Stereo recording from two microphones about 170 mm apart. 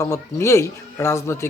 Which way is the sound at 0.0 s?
15° left (ahead or behind).